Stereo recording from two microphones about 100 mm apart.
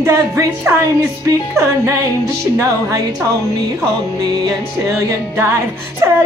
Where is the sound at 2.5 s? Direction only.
35° right (ahead or behind).